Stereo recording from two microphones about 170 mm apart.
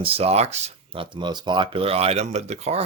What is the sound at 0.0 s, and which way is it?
Speech, 35° right (ahead or behind).